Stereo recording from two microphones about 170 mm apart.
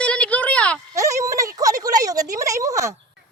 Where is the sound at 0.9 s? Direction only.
20° right (ahead or behind).